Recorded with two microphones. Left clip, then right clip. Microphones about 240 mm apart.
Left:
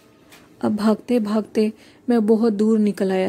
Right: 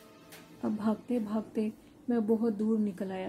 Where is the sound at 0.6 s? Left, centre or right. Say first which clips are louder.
Left 13 dB; left.